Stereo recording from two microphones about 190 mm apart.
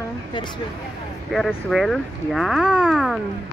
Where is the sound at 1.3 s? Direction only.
Centre (ahead or behind).